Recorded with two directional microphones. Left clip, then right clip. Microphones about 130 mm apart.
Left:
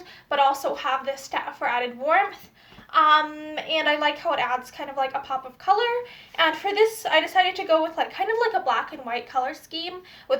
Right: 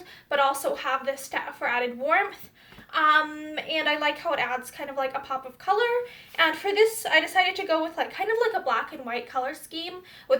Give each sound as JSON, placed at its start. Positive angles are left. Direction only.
{"t": 0.3, "sound": "a woman's voice", "side_deg": -30}